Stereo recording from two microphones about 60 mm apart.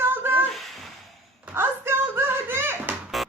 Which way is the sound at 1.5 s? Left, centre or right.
Right.